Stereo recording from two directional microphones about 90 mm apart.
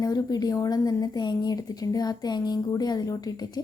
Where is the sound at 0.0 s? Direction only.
45° left (ahead or behind).